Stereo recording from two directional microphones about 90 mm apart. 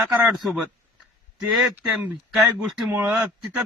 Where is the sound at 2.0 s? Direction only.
15° right (ahead or behind).